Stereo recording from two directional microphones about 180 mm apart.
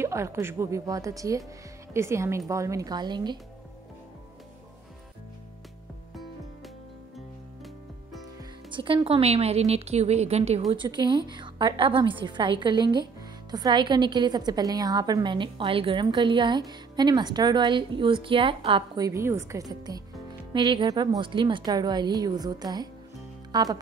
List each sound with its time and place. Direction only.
0.0 s a woman's voice: 15° right (ahead or behind)
8.7 s a woman's voice: 30° right (ahead or behind)
10.7 s a woman's voice: 25° right (ahead or behind)